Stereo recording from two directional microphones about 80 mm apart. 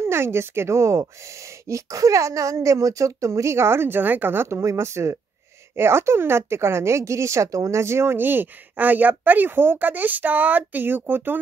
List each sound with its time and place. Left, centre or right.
0.0 s speech: right